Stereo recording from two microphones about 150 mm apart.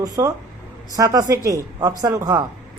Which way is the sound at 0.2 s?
20° right (ahead or behind).